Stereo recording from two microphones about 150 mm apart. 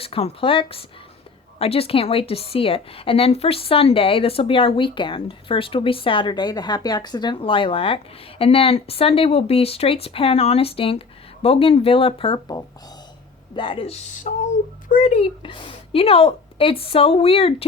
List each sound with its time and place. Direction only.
0.0 s a woman's voice: 40° left (ahead or behind); by 15.2 s 55° left (ahead or behind)
15.2 s a woman's voice: 35° left (ahead or behind)